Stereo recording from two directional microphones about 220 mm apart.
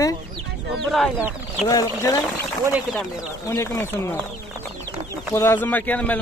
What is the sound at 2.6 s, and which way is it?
Speech, centre (ahead or behind).